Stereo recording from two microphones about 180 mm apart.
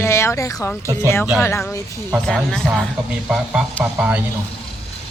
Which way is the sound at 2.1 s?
Centre (ahead or behind).